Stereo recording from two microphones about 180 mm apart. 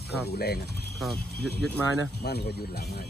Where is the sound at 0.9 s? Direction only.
Centre (ahead or behind).